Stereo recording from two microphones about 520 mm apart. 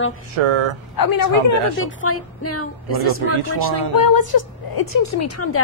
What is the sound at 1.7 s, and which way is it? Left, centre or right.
A woman's voice, left.